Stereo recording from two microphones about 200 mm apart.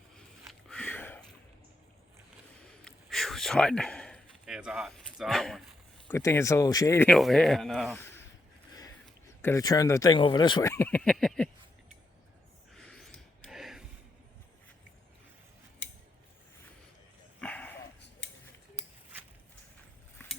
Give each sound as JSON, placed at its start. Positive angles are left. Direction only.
{"t": 0.4, "sound": "a sound", "side_deg": 5}
{"t": 2.6, "sound": "a sound", "side_deg": 0}
{"t": 6.1, "sound": "speech", "side_deg": 15}
{"t": 7.1, "sound": "speech", "side_deg": 0}
{"t": 9.4, "sound": "speech", "side_deg": 15}
{"t": 12.7, "sound": "gasp", "side_deg": 5}
{"t": 17.4, "sound": "dog", "side_deg": 5}